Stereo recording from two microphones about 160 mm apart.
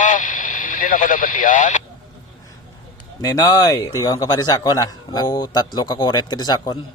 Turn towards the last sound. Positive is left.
turn(degrees=25)  # may be behind; listen again after turning